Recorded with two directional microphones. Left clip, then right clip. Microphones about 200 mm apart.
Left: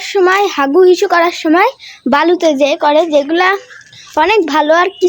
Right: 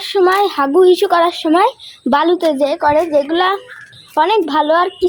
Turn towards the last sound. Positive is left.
turn(degrees=20)  # may be behind; listen again after turning